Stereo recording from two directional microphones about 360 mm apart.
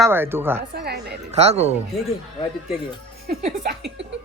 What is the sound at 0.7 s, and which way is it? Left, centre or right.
A woman's voice, right.